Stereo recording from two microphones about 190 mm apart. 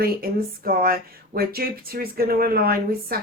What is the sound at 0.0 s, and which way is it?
Speech, 50° right (ahead or behind).